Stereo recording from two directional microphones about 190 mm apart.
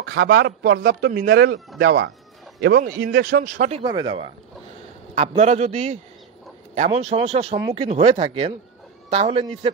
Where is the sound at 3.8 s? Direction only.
20° right (ahead or behind).